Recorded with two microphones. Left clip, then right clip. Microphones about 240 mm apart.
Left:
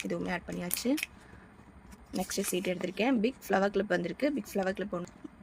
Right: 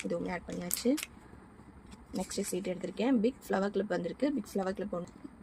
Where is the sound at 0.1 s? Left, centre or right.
Left.